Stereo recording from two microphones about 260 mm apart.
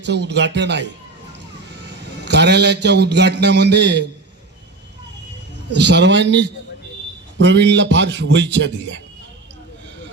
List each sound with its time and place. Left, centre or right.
0.0 s a man's voice: right
2.2 s a man's voice: right
5.7 s a man's voice: right